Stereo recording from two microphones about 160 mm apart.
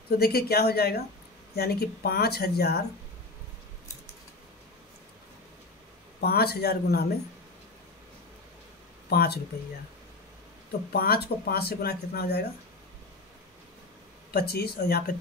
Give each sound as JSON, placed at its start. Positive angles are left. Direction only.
{"t": 0.2, "sound": "speech", "side_deg": 75}
{"t": 6.2, "sound": "speech", "side_deg": 75}
{"t": 9.1, "sound": "speech", "side_deg": 75}
{"t": 10.9, "sound": "speech", "side_deg": 75}
{"t": 14.3, "sound": "speech", "side_deg": 75}